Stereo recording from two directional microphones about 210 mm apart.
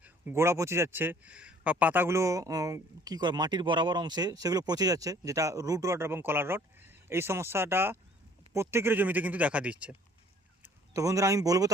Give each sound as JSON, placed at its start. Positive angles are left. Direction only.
{"t": 0.0, "sound": "speech", "side_deg": -10}